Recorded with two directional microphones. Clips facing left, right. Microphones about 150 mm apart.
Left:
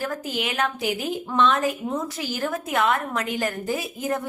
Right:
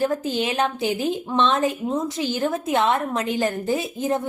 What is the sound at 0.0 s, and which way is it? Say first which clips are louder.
A woman's voice: right 6 dB; 30° right (ahead or behind).